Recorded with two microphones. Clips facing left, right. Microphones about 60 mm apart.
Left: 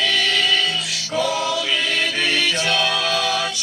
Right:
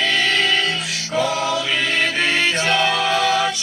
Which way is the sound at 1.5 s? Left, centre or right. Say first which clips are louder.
Right 2 dB; right.